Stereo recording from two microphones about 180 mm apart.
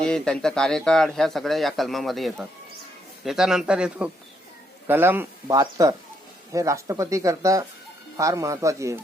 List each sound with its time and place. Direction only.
0.0 s a man's voice: 5° left (ahead or behind); by 9.0 s 15° right (ahead or behind)